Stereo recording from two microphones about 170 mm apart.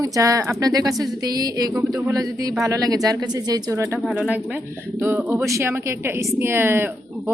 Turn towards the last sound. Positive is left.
turn(degrees=-15)  # may be behind; listen again after turning